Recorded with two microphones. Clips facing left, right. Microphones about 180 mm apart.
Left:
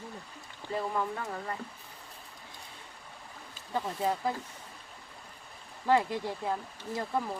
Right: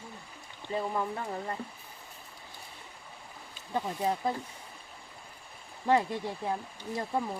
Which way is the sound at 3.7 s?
15° right (ahead or behind).